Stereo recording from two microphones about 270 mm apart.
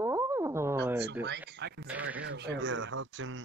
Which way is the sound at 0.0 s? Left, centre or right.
Centre.